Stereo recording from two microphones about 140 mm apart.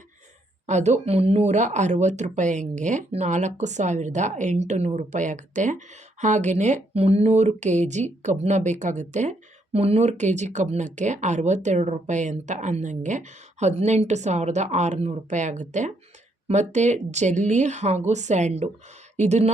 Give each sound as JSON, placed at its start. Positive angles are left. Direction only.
{"t": 0.7, "sound": "speech", "side_deg": -55}
{"t": 9.7, "sound": "speech", "side_deg": -50}